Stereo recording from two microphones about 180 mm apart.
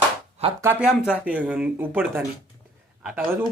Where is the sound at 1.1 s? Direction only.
5° right (ahead or behind).